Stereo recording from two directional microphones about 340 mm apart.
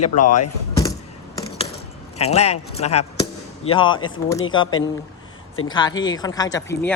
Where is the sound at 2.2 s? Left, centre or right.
Centre.